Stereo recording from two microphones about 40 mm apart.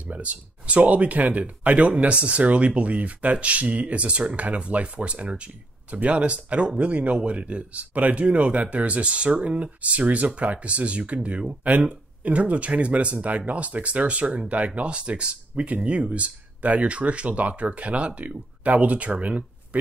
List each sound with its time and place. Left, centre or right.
0.0 s speech: right